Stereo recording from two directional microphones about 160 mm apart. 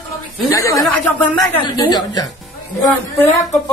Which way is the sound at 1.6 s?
25° left (ahead or behind).